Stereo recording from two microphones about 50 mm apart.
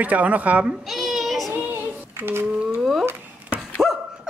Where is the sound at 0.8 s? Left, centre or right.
Centre.